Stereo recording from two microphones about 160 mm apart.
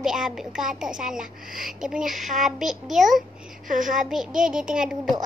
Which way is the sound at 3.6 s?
55° right (ahead or behind).